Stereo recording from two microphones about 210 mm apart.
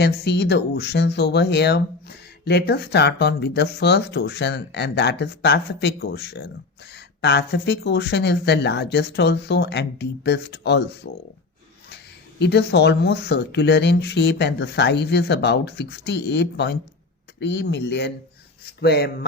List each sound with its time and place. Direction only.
0.0 s speech: 50° left (ahead or behind)
12.4 s speech: 55° left (ahead or behind)